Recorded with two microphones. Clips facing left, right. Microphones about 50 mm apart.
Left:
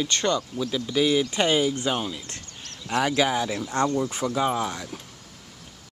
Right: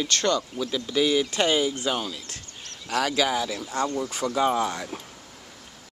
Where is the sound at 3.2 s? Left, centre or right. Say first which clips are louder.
Left 1 dB; centre.